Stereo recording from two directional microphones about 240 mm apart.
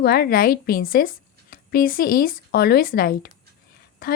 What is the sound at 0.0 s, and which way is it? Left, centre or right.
Speech, left.